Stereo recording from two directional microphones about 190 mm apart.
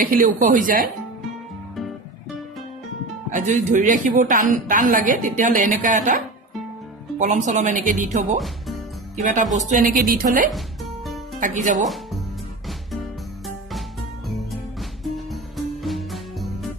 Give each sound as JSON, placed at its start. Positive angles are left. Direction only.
{"t": 0.0, "sound": "a woman's voice", "side_deg": -45}
{"t": 3.3, "sound": "a woman's voice", "side_deg": -40}
{"t": 11.8, "sound": "speech", "side_deg": 0}
{"t": 14.3, "sound": "music", "side_deg": 0}